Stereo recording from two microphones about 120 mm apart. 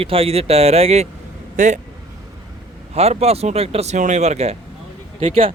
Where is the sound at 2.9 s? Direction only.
60° right (ahead or behind).